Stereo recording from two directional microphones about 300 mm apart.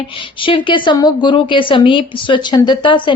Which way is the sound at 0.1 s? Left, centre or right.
Centre.